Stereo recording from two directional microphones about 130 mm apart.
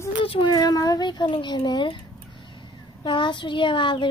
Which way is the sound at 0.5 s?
25° left (ahead or behind).